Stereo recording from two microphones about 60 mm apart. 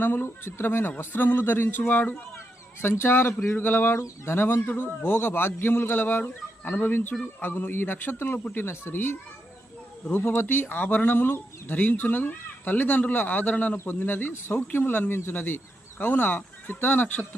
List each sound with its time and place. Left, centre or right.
0.0 s speech: left